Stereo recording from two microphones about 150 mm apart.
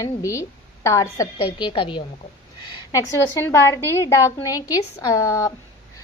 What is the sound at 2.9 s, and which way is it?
A woman's voice, 20° left (ahead or behind).